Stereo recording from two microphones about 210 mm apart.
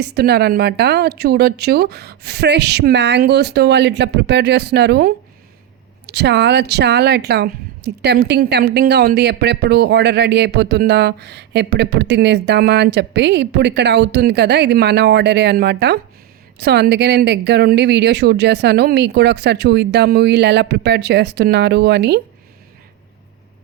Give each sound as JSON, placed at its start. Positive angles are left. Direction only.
{"t": 0.0, "sound": "speech", "side_deg": -50}